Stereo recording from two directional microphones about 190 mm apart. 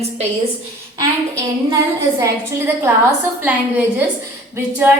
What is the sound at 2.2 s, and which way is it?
A woman's voice, 15° right (ahead or behind).